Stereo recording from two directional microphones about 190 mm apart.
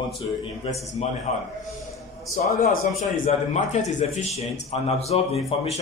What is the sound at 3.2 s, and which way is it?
A man's voice, 35° left (ahead or behind).